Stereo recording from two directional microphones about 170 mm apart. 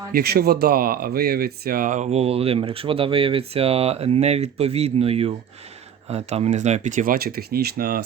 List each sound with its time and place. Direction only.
0.1 s speech: 65° right (ahead or behind)